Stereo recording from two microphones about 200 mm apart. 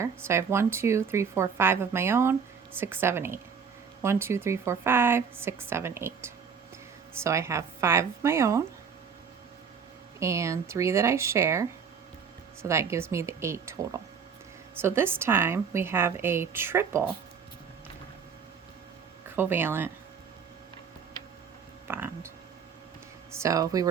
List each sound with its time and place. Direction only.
0.0 s a woman's voice: 15° right (ahead or behind)
10.2 s a woman's voice: 15° right (ahead or behind)
12.6 s a woman's voice: 15° right (ahead or behind)
19.4 s a woman's voice: 10° right (ahead or behind)
21.8 s a woman's voice: 10° right (ahead or behind)
23.4 s a woman's voice: 15° right (ahead or behind)